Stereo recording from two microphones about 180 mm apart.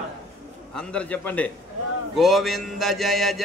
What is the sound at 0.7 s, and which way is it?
Speech, 5° left (ahead or behind).